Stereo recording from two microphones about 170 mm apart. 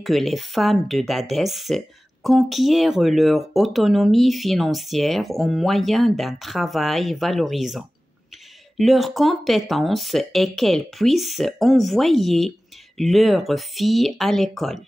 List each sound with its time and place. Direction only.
0.0 s speech: centre (ahead or behind)